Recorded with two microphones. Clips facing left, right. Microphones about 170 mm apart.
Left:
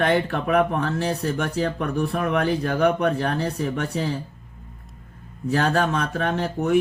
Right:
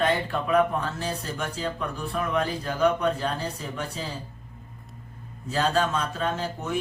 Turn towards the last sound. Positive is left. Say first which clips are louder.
# left 8 dB
turn(degrees=65)  # may be behind; listen again after turning